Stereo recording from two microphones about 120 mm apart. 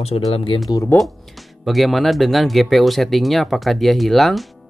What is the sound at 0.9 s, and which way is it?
Speech, 15° left (ahead or behind).